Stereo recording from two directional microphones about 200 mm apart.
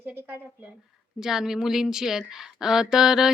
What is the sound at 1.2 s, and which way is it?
Speech, centre (ahead or behind).